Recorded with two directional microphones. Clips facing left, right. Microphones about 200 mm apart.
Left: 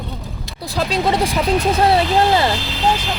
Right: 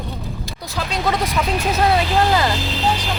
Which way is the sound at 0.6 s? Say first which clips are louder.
Left 4 dB; 35° left (ahead or behind).